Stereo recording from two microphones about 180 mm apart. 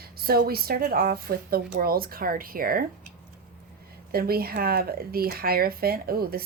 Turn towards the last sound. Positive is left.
turn(degrees=-55)  # may be behind; listen again after turning